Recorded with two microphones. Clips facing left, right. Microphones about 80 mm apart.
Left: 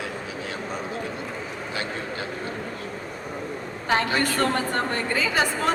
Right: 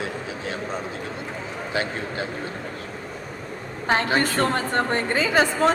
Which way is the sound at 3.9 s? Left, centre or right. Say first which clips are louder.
Right 2 dB; right.